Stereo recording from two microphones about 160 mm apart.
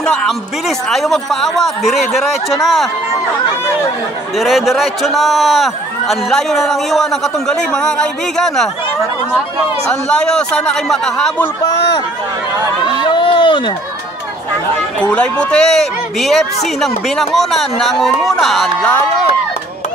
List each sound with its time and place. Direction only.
0.0 s a man's voice: centre (ahead or behind)
4.4 s a man's voice: centre (ahead or behind)
9.8 s a man's voice: 5° left (ahead or behind)
12.8 s speech: 30° left (ahead or behind)
15.0 s a man's voice: 5° left (ahead or behind)